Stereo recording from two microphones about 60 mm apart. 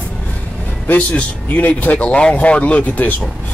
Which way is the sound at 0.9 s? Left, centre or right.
Left.